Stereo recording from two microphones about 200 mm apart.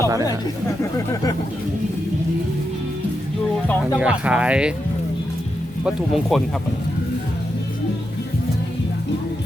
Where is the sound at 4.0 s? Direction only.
5° right (ahead or behind).